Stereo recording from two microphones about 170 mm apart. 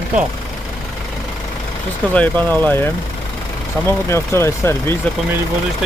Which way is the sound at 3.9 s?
15° left (ahead or behind).